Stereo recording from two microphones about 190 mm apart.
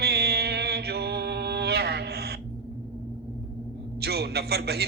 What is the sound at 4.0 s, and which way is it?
Speech, 60° right (ahead or behind).